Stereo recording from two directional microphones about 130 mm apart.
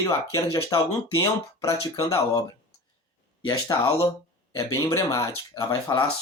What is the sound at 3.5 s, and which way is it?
A man's voice, 30° left (ahead or behind).